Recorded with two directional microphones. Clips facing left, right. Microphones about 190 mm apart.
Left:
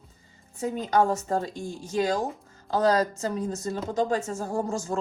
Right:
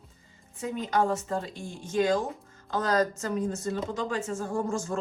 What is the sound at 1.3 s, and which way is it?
A woman's voice, 40° left (ahead or behind).